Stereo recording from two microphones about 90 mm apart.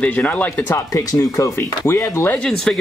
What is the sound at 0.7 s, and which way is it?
Speech, 40° left (ahead or behind).